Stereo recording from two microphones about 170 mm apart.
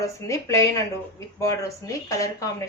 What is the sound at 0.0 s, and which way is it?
A woman's voice, 20° left (ahead or behind).